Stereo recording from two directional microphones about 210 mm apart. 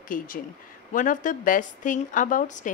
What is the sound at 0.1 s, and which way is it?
Speech, 40° left (ahead or behind).